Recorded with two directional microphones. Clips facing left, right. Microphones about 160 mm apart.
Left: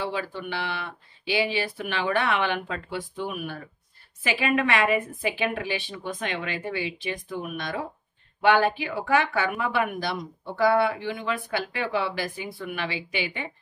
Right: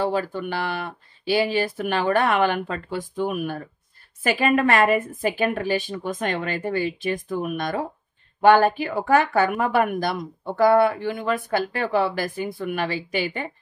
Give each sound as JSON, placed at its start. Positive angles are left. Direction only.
{"t": 0.0, "sound": "speech", "side_deg": -45}